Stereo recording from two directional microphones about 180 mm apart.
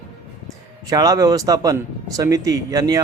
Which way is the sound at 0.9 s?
20° right (ahead or behind).